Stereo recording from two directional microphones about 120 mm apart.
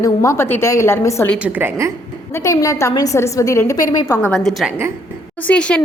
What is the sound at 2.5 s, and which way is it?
A woman's voice, 30° left (ahead or behind).